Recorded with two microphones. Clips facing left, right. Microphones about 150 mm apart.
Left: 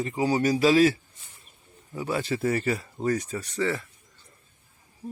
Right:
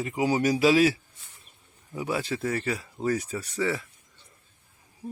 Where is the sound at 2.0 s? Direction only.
5° right (ahead or behind).